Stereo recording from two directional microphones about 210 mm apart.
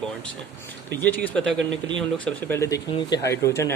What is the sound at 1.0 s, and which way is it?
Speech, 10° left (ahead or behind).